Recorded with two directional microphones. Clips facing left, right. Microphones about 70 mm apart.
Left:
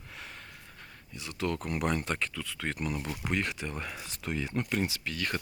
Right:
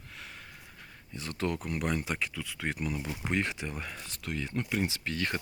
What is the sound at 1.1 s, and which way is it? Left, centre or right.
Speech, right.